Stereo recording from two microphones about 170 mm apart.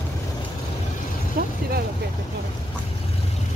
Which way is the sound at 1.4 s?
60° right (ahead or behind).